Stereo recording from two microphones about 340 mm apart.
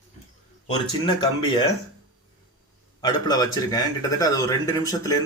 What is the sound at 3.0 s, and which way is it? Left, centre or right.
A man's voice, centre.